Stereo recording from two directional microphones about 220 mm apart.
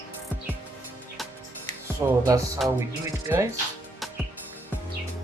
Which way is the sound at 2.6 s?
Centre (ahead or behind).